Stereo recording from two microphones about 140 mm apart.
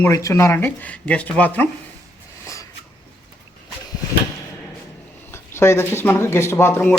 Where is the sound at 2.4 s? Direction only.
25° left (ahead or behind).